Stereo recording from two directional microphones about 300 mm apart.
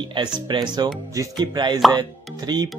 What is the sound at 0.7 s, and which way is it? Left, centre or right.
Speech, centre.